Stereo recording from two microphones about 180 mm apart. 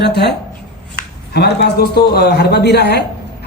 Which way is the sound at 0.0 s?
65° left (ahead or behind).